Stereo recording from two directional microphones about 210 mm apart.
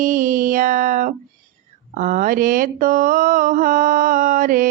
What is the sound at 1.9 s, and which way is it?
Mantra, 40° right (ahead or behind).